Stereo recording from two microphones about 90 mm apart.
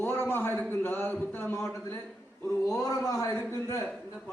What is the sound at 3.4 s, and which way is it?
Speech, 30° left (ahead or behind).